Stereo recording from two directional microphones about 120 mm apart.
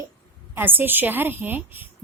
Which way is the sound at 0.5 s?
15° right (ahead or behind).